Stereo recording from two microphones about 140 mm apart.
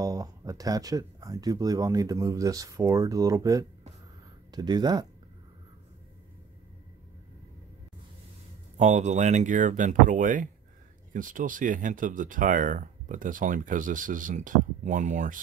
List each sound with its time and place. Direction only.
0.0 s speech: 25° right (ahead or behind)
8.7 s speech: 55° right (ahead or behind)